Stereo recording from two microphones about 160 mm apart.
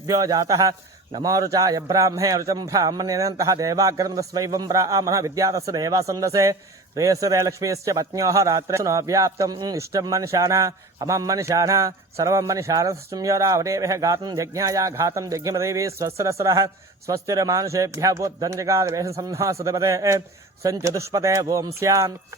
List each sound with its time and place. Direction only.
0.1 s a man's voice: 25° right (ahead or behind)